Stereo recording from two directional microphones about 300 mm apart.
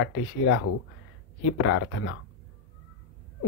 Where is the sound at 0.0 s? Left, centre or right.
Left.